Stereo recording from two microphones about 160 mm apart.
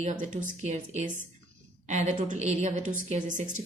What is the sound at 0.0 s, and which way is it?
A woman's voice, 50° right (ahead or behind).